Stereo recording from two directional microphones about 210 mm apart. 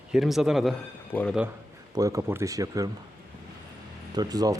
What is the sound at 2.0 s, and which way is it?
Speech, 15° right (ahead or behind).